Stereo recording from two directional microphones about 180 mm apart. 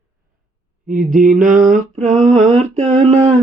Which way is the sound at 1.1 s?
50° right (ahead or behind).